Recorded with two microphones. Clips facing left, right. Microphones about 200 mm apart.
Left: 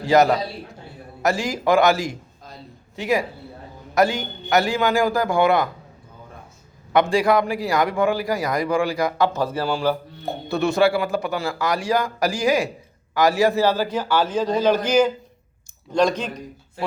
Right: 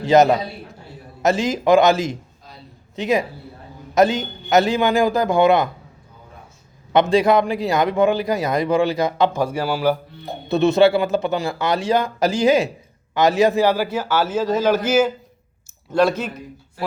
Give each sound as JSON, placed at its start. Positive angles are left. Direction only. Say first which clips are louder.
{"t": 0.0, "sound": "a man's voice", "louder": "right 3 dB", "side_deg": -20}
{"t": 6.9, "sound": "a man's voice", "louder": "right 2 dB", "side_deg": -20}
{"t": 10.5, "sound": "a man's voice", "louder": "right 4 dB", "side_deg": -20}